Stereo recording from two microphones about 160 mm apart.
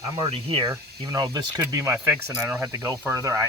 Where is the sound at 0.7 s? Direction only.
20° right (ahead or behind).